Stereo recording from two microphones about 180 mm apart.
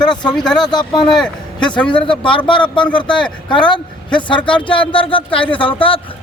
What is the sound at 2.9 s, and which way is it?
Speech, 25° left (ahead or behind).